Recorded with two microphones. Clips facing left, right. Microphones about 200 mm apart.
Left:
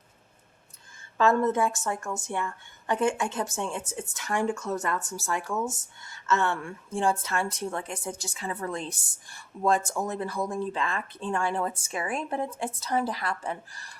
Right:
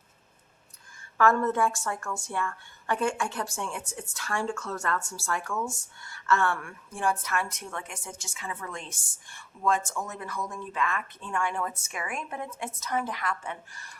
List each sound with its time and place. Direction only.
1.2 s a woman's voice: 20° left (ahead or behind); by 13.9 s 35° left (ahead or behind)